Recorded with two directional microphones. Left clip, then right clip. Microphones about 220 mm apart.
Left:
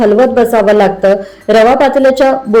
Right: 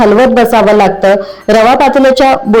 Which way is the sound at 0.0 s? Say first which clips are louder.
Right 2 dB; 30° right (ahead or behind).